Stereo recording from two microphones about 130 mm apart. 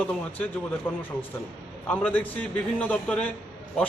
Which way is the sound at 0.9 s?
15° left (ahead or behind).